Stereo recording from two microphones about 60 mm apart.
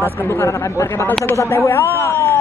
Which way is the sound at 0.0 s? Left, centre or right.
Left.